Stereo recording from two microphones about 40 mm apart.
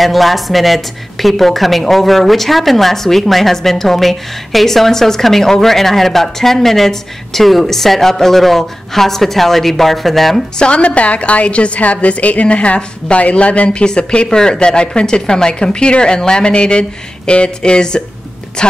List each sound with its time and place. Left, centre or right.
0.0 s a woman's voice: centre
10.6 s a woman's voice: left